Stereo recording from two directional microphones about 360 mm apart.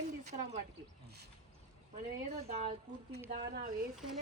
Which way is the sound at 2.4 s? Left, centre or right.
Centre.